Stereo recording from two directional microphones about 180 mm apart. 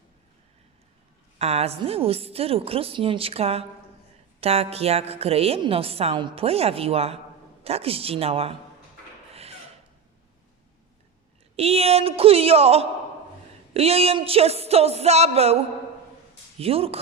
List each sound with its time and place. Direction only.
1.4 s a woman's voice: 35° right (ahead or behind)
9.3 s filing: 35° right (ahead or behind)
11.5 s a woman's voice: 35° right (ahead or behind)